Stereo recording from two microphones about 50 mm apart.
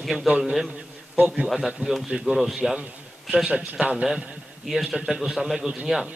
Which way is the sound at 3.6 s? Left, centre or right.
Right.